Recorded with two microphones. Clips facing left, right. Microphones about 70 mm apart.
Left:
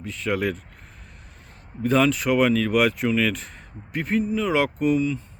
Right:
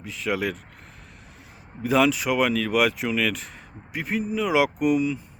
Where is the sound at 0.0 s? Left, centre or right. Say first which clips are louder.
Left 2 dB; centre.